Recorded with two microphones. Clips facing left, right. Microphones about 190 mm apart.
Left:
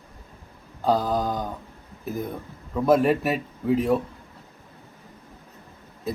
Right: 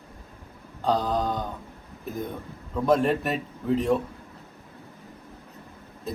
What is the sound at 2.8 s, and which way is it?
A man's voice, 5° left (ahead or behind).